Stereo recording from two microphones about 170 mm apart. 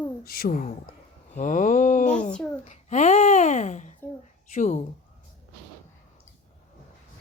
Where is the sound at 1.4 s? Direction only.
50° left (ahead or behind).